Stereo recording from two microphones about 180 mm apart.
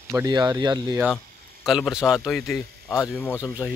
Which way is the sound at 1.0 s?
Centre (ahead or behind).